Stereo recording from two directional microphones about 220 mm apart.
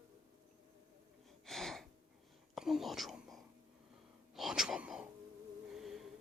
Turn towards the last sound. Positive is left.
turn(degrees=0)  # may be behind; listen again after turning